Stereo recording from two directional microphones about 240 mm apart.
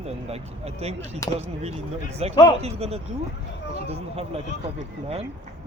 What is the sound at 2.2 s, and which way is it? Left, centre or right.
Speech, right.